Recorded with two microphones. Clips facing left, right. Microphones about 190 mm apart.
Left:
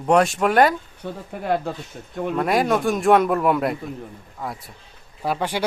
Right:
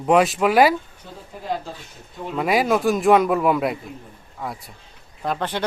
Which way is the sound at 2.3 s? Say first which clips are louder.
Right 1 dB; centre (ahead or behind).